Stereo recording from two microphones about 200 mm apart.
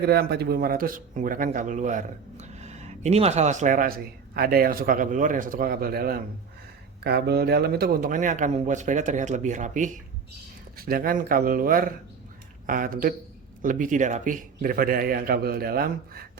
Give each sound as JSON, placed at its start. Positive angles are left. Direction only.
{"t": 0.0, "sound": "speech", "side_deg": -55}